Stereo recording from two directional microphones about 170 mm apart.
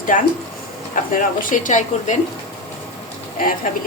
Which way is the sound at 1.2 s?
50° left (ahead or behind).